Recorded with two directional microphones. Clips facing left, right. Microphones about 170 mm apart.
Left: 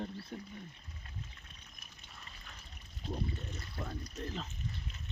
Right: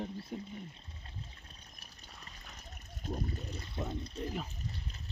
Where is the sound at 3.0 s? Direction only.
45° right (ahead or behind).